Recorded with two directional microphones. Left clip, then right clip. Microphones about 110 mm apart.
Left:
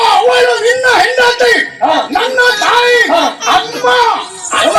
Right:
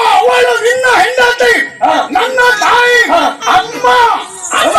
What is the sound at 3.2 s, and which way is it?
Speech, 20° left (ahead or behind).